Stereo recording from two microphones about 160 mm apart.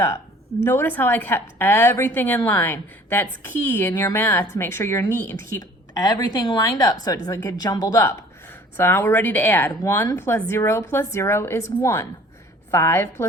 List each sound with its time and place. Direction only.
0.6 s a woman's voice: 15° left (ahead or behind)